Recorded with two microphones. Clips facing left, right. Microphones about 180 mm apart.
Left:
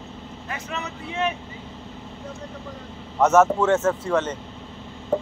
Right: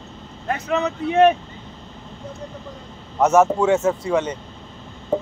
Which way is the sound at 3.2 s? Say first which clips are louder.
Right 1 dB; 10° right (ahead or behind).